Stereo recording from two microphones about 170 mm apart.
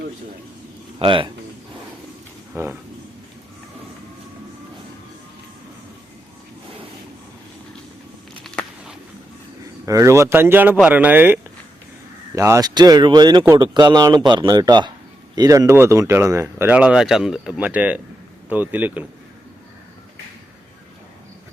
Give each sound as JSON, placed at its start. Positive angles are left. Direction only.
{"t": 0.9, "sound": "speech", "side_deg": -30}
{"t": 2.5, "sound": "speech", "side_deg": -15}
{"t": 8.4, "sound": "a sound", "side_deg": 5}
{"t": 9.8, "sound": "speech", "side_deg": -20}